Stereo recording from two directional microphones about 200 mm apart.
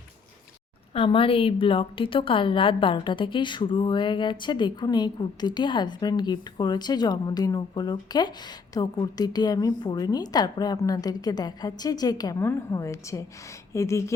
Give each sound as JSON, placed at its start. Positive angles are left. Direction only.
{"t": 0.9, "sound": "a woman's voice", "side_deg": 25}